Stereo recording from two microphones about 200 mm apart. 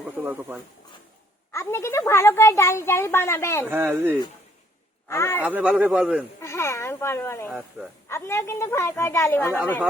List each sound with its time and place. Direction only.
0.2 s speech: 10° right (ahead or behind)
1.5 s speech: 15° left (ahead or behind)
3.7 s speech: 10° right (ahead or behind)
5.0 s speech: 10° left (ahead or behind)
5.5 s speech: 5° right (ahead or behind)
6.4 s speech: 15° left (ahead or behind)